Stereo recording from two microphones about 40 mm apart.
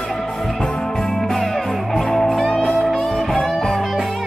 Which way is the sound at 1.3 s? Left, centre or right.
Centre.